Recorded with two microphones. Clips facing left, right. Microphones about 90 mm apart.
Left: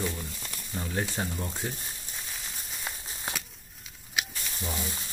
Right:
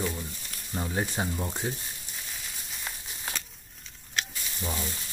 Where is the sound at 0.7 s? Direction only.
20° right (ahead or behind).